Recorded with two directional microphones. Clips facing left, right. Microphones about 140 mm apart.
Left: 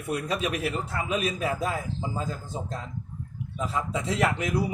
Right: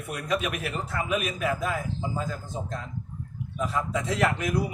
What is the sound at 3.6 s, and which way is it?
Speech, 25° left (ahead or behind).